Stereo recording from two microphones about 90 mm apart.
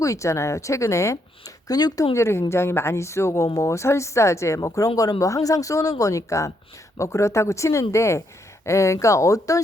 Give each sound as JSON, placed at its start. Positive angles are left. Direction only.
{"t": 0.0, "sound": "a woman's voice", "side_deg": 35}
{"t": 2.1, "sound": "a woman's voice", "side_deg": 30}